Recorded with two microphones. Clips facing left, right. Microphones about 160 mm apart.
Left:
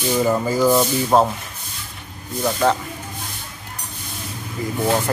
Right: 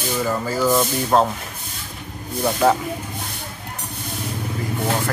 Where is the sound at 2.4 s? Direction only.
5° right (ahead or behind).